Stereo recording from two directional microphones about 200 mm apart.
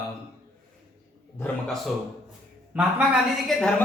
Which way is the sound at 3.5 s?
5° left (ahead or behind).